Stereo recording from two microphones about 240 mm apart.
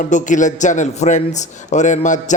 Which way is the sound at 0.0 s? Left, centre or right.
Left.